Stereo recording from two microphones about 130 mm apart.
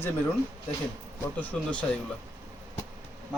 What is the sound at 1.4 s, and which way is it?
Speech, 10° left (ahead or behind).